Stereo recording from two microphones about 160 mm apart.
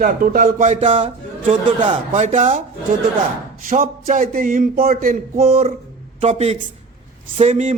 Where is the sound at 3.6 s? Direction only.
55° right (ahead or behind).